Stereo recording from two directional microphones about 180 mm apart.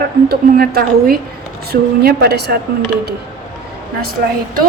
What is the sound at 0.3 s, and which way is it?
A woman's voice, 60° right (ahead or behind).